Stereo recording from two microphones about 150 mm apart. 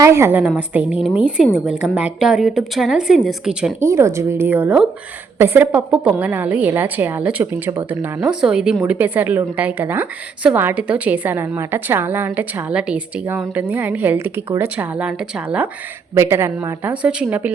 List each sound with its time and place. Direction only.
0.0 s a woman's voice: 20° right (ahead or behind)
3.8 s a woman's voice: 20° right (ahead or behind)